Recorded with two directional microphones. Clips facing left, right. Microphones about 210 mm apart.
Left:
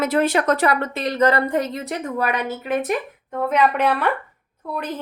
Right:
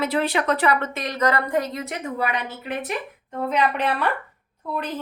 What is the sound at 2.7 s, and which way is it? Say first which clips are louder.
Speech: left 7 dB; 50° left (ahead or behind).